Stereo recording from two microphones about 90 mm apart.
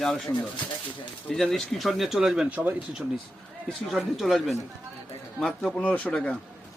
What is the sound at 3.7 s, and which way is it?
Speech, centre (ahead or behind).